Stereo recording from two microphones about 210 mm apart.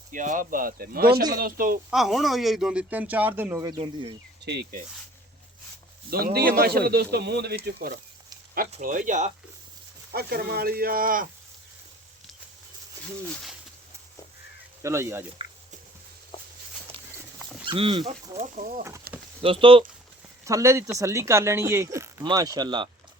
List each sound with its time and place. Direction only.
0.1 s speech: 40° right (ahead or behind)
1.1 s speech: 20° right (ahead or behind)
1.4 s speech: 45° right (ahead or behind)
1.9 s speech: centre (ahead or behind); by 4.2 s 20° right (ahead or behind)
4.4 s speech: 50° right (ahead or behind)
6.1 s speech: 45° right (ahead or behind)
10.1 s speech: 45° right (ahead or behind)
14.8 s speech: 15° right (ahead or behind)
17.7 s speech: 25° right (ahead or behind)
19.4 s speech: 25° right (ahead or behind)
20.4 s speech: 15° right (ahead or behind)